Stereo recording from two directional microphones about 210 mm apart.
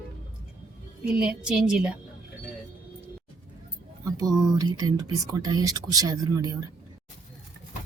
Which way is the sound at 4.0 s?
15° right (ahead or behind).